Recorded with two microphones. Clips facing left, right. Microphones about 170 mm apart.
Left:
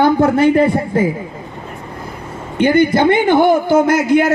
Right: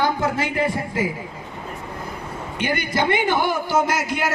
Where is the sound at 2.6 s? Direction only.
55° left (ahead or behind).